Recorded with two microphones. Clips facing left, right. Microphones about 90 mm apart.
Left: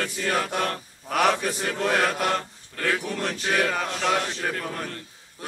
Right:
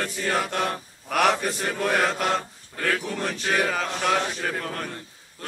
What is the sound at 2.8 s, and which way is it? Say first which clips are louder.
Speech: even; 5° left (ahead or behind).